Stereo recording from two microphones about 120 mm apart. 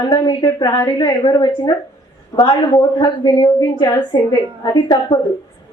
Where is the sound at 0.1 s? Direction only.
30° left (ahead or behind).